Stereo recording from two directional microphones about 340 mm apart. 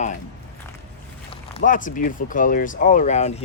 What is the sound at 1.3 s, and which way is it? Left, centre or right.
Speech, centre.